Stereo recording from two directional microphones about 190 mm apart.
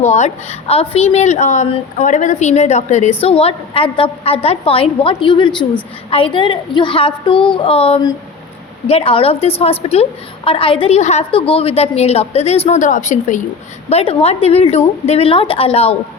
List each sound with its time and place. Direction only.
0.0 s a woman's voice: 35° left (ahead or behind)